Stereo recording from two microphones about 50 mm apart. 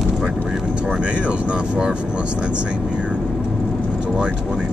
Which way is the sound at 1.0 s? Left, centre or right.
Centre.